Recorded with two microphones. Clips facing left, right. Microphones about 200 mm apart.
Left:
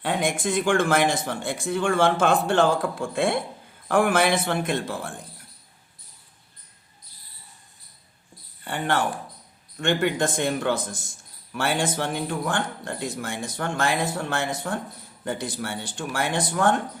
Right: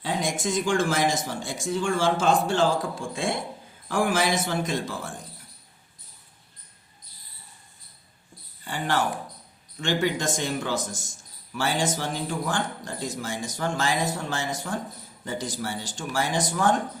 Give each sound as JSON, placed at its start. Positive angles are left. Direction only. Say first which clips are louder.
{"t": 0.0, "sound": "speech", "louder": "left 3 dB", "side_deg": 60}
{"t": 8.6, "sound": "speech", "louder": "left 1 dB", "side_deg": 60}